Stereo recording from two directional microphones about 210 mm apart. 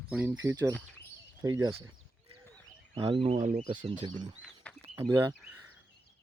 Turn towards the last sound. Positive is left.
turn(degrees=-10)  # may be behind; listen again after turning